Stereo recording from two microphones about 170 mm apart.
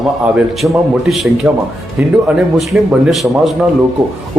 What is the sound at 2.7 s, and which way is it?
Speech, centre (ahead or behind).